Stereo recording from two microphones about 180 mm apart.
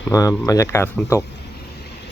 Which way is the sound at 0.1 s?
20° left (ahead or behind).